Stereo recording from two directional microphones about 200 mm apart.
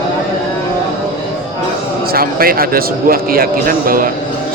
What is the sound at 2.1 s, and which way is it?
A man's voice, 45° right (ahead or behind).